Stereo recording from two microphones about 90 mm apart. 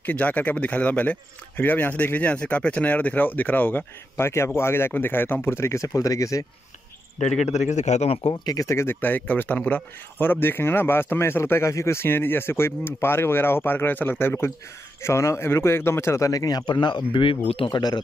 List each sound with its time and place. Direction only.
0.0 s speech: 20° left (ahead or behind); by 6.4 s 35° left (ahead or behind)
8.1 s speech: 75° left (ahead or behind)
8.5 s a man's voice: 35° left (ahead or behind); by 17.6 s 85° left
17.6 s speech: 55° left (ahead or behind)